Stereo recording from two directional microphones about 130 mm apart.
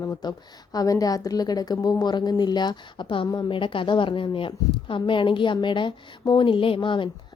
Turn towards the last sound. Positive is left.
turn(degrees=40)  # may be behind; listen again after turning